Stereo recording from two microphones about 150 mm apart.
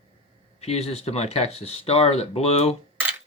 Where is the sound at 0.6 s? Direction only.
45° left (ahead or behind).